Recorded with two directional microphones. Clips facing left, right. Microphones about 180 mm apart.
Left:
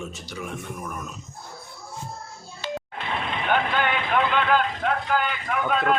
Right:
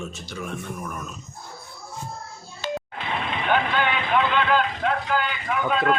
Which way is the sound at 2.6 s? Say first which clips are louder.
Right 2 dB; 55° right (ahead or behind).